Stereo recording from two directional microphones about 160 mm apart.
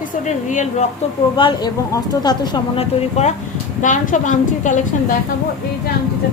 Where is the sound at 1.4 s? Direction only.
30° left (ahead or behind).